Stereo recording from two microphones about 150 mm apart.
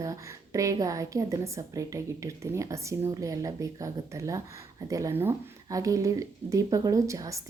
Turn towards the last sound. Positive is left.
turn(degrees=-20)  # may be behind; listen again after turning